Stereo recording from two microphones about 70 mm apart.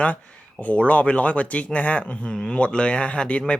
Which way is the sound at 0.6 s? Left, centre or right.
Centre.